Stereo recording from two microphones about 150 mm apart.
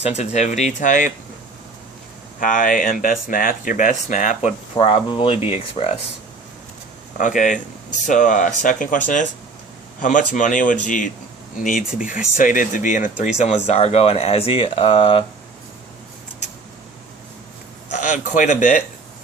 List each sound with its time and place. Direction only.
0.0 s speech: 45° left (ahead or behind)
2.4 s speech: 65° left (ahead or behind)
4.4 s speech: 35° left (ahead or behind)
7.2 s speech: 60° left (ahead or behind); by 15.2 s 35° left (ahead or behind)
17.9 s speech: 55° left (ahead or behind)